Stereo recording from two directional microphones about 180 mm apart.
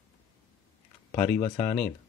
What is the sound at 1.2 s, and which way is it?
Speech, 15° left (ahead or behind).